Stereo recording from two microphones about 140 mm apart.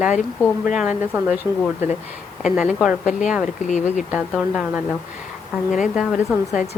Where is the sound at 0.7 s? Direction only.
10° right (ahead or behind).